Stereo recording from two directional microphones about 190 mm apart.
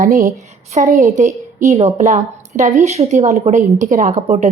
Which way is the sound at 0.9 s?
15° right (ahead or behind).